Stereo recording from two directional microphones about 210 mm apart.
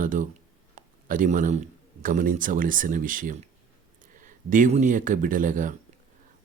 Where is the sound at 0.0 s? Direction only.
40° right (ahead or behind).